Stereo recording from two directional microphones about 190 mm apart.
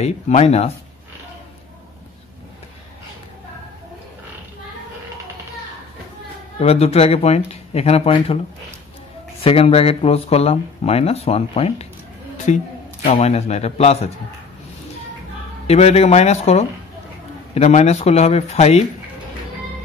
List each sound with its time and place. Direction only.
0.0 s speech: 35° left (ahead or behind)
6.6 s speech: 35° left (ahead or behind)
9.4 s speech: 30° left (ahead or behind)
15.6 s speech: 35° left (ahead or behind)